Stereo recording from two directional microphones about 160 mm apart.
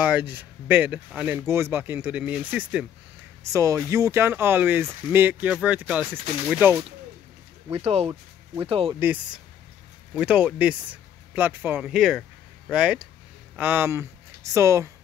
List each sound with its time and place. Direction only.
0.0 s speech: 10° right (ahead or behind)
3.5 s speech: 20° right (ahead or behind)
7.7 s speech: 40° right (ahead or behind)
9.0 s speech: 10° right (ahead or behind)